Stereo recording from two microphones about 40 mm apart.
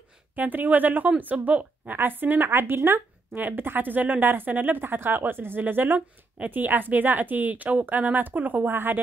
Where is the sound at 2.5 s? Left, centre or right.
Right.